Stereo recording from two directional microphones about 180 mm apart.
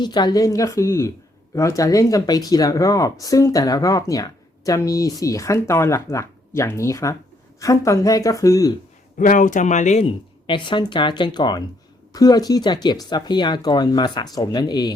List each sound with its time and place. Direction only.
0.0 s a woman's voice: 25° left (ahead or behind)
9.1 s speech: 45° left (ahead or behind); by 14.9 s 25° left (ahead or behind)